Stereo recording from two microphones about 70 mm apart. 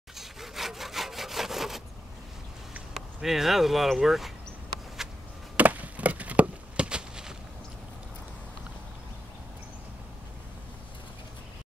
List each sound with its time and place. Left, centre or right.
0.2 s sawing: centre
2.9 s speech: centre
5.6 s a sound: right